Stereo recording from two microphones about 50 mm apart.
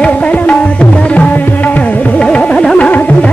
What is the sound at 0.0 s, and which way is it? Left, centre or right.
Tabla, left.